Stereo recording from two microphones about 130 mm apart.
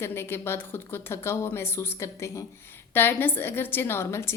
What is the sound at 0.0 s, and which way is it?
A woman's voice, 20° left (ahead or behind).